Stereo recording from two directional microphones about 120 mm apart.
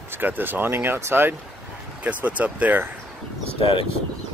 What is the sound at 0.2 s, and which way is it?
Speech, 15° right (ahead or behind).